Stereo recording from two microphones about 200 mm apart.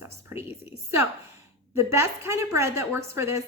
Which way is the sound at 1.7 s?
15° right (ahead or behind).